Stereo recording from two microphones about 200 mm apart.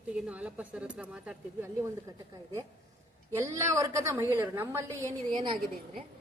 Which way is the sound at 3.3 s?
15° right (ahead or behind).